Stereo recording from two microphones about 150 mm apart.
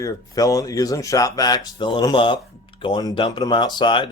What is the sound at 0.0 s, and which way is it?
Speech, 25° left (ahead or behind).